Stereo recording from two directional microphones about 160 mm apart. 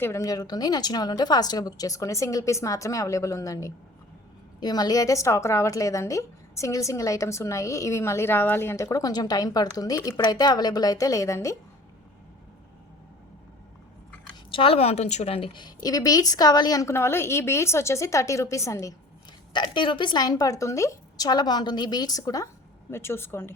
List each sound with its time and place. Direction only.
0.0 s a woman's voice: 20° left (ahead or behind)
14.5 s a woman's voice: 35° left (ahead or behind); by 18.9 s 20° left (ahead or behind)
19.5 s a woman's voice: 30° left (ahead or behind); by 23.6 s 15° left (ahead or behind)